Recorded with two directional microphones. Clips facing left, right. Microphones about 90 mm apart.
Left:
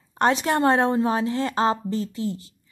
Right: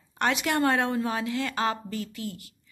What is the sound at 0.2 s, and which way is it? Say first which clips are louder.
A woman's voice: left 5 dB; 35° left (ahead or behind).